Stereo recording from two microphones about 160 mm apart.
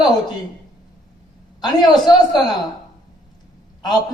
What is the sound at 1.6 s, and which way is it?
Speech, 25° left (ahead or behind).